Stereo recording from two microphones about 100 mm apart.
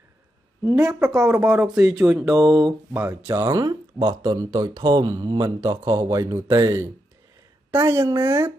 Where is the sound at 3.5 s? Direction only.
40° right (ahead or behind).